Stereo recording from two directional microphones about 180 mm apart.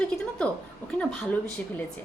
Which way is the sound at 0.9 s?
10° left (ahead or behind).